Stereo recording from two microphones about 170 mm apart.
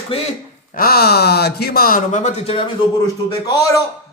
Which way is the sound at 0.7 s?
65° left (ahead or behind).